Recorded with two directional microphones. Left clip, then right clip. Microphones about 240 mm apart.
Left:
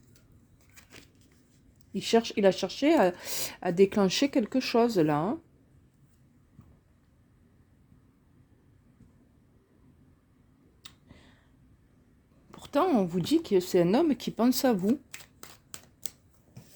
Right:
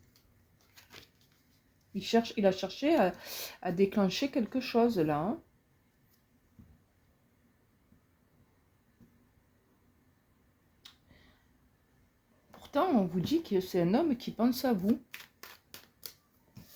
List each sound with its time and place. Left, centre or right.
0.9 s a sound: left
1.9 s speech: left
12.6 s speech: left
14.8 s shuffling cards: centre